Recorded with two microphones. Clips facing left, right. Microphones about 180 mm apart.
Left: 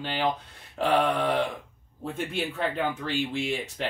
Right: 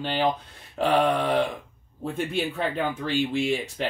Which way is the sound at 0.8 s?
15° right (ahead or behind).